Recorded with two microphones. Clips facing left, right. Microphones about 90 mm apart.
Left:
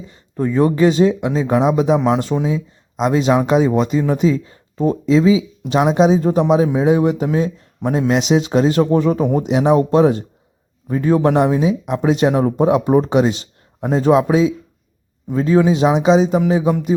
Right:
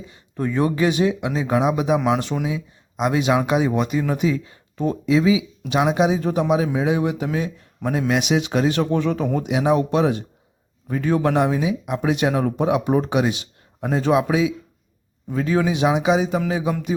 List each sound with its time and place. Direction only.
0.3 s speech: 30° left (ahead or behind)